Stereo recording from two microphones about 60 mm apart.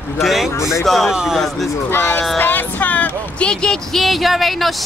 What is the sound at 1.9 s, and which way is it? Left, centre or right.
Speech, left.